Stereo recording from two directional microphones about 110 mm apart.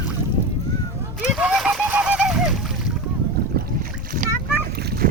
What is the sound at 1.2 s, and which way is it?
Splash, 5° right (ahead or behind).